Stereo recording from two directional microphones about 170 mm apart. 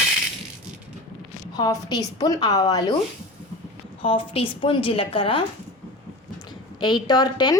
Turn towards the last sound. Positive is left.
turn(degrees=25)  # may be behind; listen again after turning